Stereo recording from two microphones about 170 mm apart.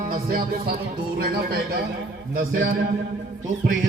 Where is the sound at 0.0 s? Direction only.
60° right (ahead or behind).